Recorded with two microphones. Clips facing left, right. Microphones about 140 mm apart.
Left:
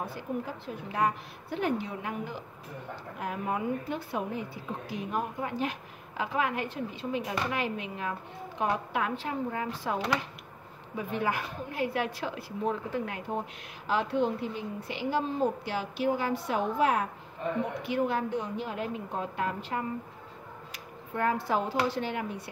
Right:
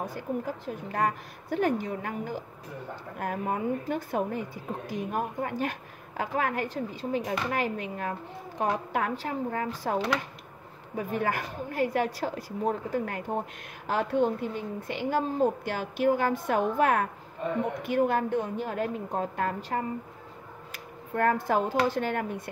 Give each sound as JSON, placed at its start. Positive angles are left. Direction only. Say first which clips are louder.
{"t": 0.0, "sound": "a woman's voice", "louder": "right 2 dB", "side_deg": -45}
{"t": 11.0, "sound": "a woman's voice", "louder": "right 2 dB", "side_deg": -45}